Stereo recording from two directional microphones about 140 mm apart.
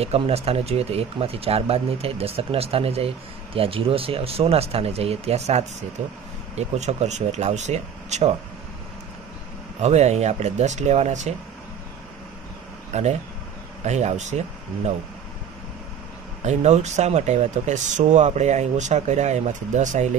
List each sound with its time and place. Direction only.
0.0 s speech: 45° right (ahead or behind)
9.8 s speech: 50° right (ahead or behind)
12.9 s speech: 55° right (ahead or behind)
16.4 s speech: 55° right (ahead or behind)